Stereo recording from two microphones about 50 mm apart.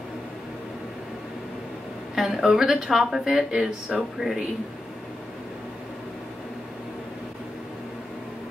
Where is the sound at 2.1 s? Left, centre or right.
Centre.